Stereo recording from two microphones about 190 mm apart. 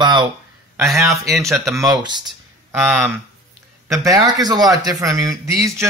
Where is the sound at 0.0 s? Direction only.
25° right (ahead or behind).